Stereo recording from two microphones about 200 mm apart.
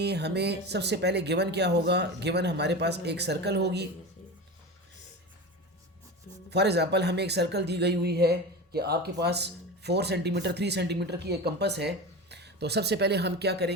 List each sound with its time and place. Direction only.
0.0 s speech: 55° right (ahead or behind)
6.5 s speech: 55° right (ahead or behind)